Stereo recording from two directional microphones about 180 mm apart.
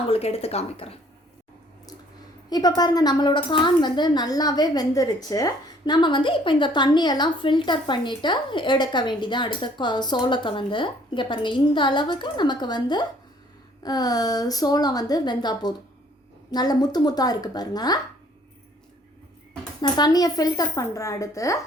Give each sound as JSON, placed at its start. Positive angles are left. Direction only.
{"t": 0.1, "sound": "speech", "side_deg": 35}
{"t": 2.5, "sound": "a woman's voice", "side_deg": 20}
{"t": 19.8, "sound": "a woman's voice", "side_deg": 20}